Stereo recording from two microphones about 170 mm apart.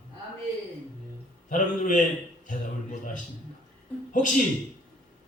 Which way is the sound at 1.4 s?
50° left (ahead or behind).